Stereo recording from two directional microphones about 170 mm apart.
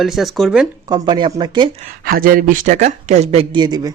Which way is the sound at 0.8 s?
25° right (ahead or behind).